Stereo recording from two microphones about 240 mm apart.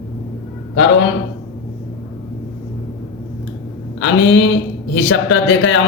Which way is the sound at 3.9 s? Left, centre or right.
Left.